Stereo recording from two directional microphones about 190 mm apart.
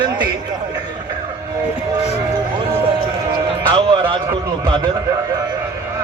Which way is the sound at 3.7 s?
25° right (ahead or behind).